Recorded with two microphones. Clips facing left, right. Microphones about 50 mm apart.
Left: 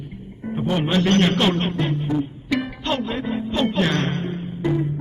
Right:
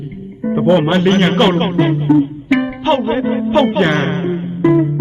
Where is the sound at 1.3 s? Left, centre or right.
Right.